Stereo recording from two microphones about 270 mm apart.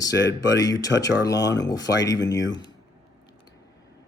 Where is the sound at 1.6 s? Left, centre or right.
Centre.